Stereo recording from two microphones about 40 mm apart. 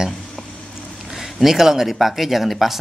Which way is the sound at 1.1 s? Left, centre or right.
Centre.